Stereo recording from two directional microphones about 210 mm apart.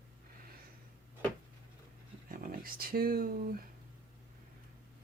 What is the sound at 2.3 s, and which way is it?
Speech, 45° right (ahead or behind).